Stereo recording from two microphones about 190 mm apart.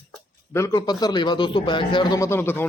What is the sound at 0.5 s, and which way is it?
A man's voice, 15° left (ahead or behind).